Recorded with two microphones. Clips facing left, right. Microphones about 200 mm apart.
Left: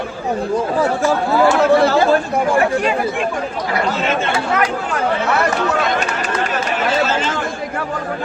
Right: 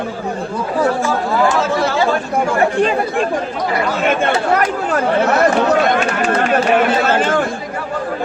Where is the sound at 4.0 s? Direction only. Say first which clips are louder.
Right 3 dB; 55° right (ahead or behind).